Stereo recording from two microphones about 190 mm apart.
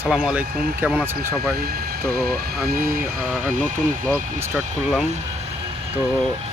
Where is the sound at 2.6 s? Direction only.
50° right (ahead or behind).